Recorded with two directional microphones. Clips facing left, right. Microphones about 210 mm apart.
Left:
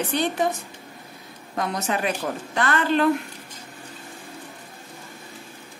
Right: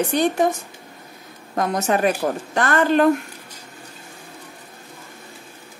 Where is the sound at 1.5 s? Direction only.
45° right (ahead or behind).